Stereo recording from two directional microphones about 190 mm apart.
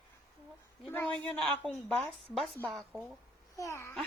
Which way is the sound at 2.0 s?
Centre (ahead or behind).